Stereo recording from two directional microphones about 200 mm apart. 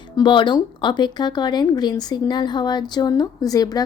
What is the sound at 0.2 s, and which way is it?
A woman's voice, 25° left (ahead or behind).